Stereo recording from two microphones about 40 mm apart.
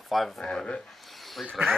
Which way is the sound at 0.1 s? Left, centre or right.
Centre.